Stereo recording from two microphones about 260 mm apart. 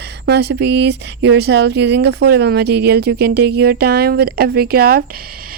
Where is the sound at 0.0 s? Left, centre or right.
Right.